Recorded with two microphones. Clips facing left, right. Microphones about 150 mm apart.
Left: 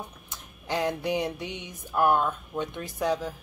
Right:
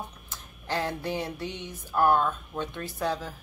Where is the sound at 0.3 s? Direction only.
15° left (ahead or behind).